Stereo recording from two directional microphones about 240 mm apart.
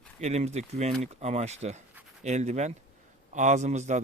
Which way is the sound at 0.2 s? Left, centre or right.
Right.